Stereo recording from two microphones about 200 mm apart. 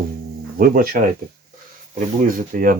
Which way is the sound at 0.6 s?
45° right (ahead or behind).